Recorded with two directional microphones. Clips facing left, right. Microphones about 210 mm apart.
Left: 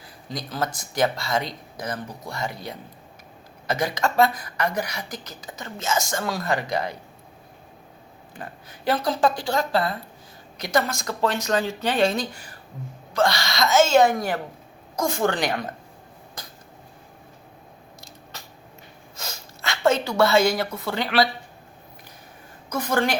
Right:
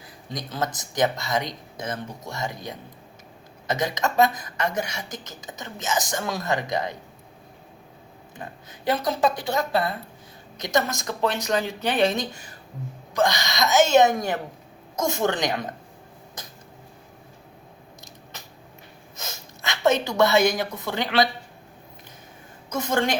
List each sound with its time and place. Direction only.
0.3 s speech: 20° right (ahead or behind)
8.4 s speech: 20° right (ahead or behind)
19.1 s a sound: 20° right (ahead or behind)
22.7 s speech: 25° right (ahead or behind)